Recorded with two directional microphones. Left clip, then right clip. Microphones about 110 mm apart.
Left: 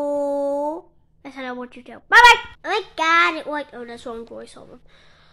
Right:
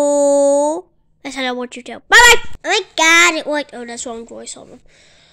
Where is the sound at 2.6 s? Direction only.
45° right (ahead or behind).